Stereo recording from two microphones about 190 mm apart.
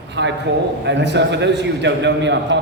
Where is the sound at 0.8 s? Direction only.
65° right (ahead or behind).